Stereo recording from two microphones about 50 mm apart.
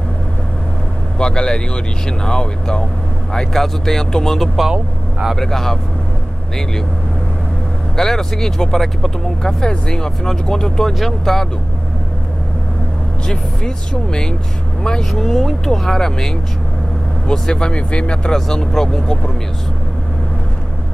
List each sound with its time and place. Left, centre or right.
1.1 s speech: centre
7.9 s speech: centre
10.9 s speech: centre
13.3 s speech: centre